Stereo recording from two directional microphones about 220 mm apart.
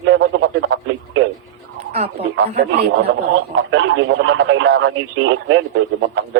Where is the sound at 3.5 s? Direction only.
60° right (ahead or behind).